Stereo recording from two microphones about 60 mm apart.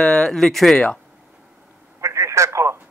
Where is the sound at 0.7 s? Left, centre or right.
Left.